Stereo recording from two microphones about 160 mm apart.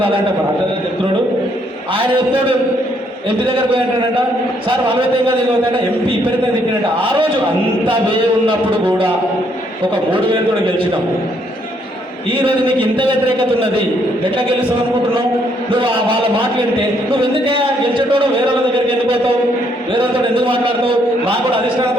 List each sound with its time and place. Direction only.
1.9 s a man's voice: 30° right (ahead or behind)
4.7 s a man's voice: 30° right (ahead or behind)
6.9 s a man's voice: 35° right (ahead or behind)
9.8 s a man's voice: 30° right (ahead or behind)
12.3 s a man's voice: 30° right (ahead or behind)
15.7 s a man's voice: 30° right (ahead or behind)
19.9 s a man's voice: 35° right (ahead or behind)